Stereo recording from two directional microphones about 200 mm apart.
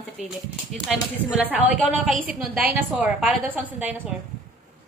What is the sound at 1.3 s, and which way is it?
A woman's voice, 10° right (ahead or behind).